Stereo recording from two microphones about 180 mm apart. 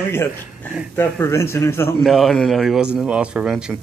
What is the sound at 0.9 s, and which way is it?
Speech, 15° left (ahead or behind).